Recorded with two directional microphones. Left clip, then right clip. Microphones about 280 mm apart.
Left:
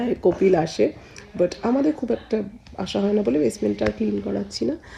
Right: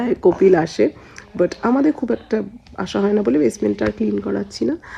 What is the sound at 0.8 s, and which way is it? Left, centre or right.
Speech, right.